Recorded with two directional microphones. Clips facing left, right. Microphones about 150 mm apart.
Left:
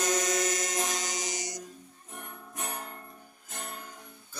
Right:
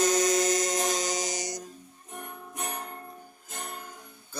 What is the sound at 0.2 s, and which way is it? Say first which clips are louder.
Music: right 5 dB; 35° right (ahead or behind).